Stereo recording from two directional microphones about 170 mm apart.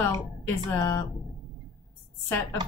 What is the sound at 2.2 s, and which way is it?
Speech, 15° left (ahead or behind).